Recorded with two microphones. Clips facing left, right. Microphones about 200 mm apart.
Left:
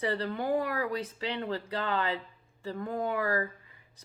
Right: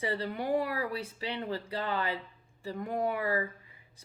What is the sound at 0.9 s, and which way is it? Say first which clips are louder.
Speech: left 3 dB; 10° right (ahead or behind).